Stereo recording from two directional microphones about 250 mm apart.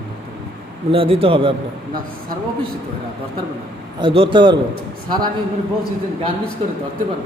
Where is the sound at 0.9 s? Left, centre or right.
Right.